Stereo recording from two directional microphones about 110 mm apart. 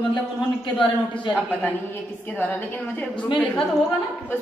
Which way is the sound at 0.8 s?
50° left (ahead or behind).